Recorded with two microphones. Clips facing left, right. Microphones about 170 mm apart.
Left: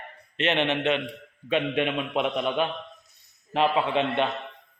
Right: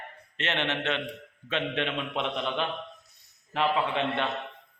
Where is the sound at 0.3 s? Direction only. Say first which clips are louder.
Left 6 dB; 15° left (ahead or behind).